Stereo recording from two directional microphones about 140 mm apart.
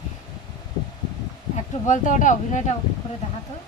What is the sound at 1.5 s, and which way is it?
Speech, 60° left (ahead or behind).